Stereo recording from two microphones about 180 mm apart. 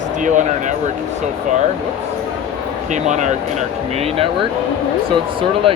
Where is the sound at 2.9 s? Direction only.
40° right (ahead or behind).